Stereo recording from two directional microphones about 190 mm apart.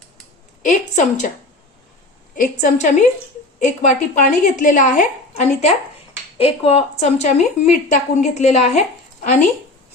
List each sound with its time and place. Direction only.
0.6 s a woman's voice: 40° left (ahead or behind)
2.3 s a woman's voice: 45° left (ahead or behind)